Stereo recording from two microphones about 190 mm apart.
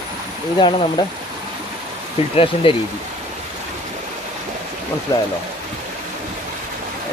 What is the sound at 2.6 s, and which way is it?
Speech, 25° left (ahead or behind).